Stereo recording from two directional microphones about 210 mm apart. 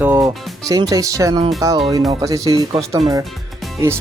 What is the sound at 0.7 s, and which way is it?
Speech, 15° right (ahead or behind).